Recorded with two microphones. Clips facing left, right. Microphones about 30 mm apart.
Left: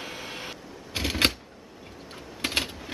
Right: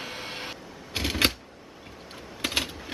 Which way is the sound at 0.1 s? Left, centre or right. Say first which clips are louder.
Right 1 dB; right.